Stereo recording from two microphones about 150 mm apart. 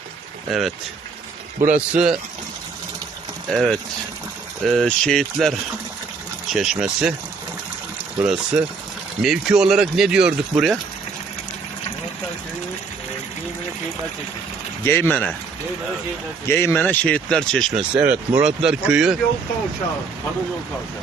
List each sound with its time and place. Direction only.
0.4 s speech: centre (ahead or behind)
1.7 s speech: 5° right (ahead or behind)
3.5 s speech: centre (ahead or behind)
8.2 s speech: 5° right (ahead or behind)
14.8 s speech: 15° left (ahead or behind)
16.5 s speech: 15° left (ahead or behind)
17.7 s speech: 10° right (ahead or behind)